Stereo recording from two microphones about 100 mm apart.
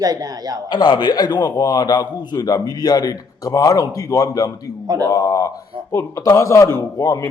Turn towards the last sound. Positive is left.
turn(degrees=30)  # may be behind; listen again after turning